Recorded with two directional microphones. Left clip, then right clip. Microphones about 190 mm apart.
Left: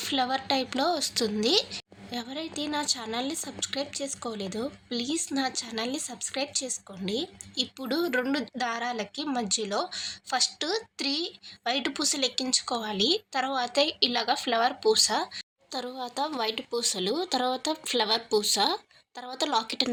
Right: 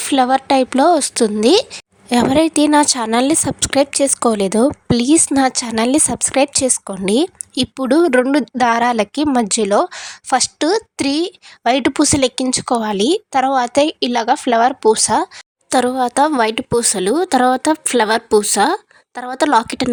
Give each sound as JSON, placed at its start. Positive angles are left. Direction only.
{"t": 0.0, "sound": "a woman's voice", "side_deg": -45}
{"t": 15.7, "sound": "a woman's voice", "side_deg": -55}